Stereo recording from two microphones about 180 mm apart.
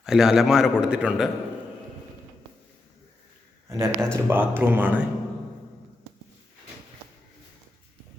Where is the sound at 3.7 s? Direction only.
15° right (ahead or behind).